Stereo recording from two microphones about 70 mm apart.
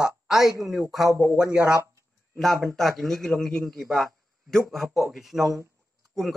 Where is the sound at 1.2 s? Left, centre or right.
Centre.